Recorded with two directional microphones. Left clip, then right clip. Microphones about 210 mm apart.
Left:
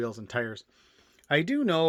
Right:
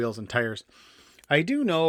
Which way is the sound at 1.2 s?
10° right (ahead or behind).